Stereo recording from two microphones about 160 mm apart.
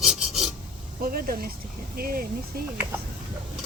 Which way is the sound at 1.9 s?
65° right (ahead or behind).